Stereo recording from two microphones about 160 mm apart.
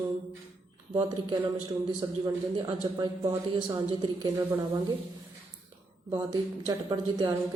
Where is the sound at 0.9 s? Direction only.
30° right (ahead or behind).